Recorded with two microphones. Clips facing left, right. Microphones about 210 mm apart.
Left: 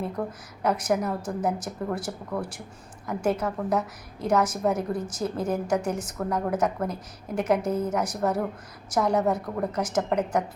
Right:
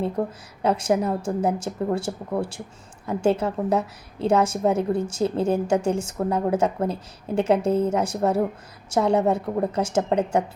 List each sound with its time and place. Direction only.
0.2 s a woman's voice: 25° right (ahead or behind)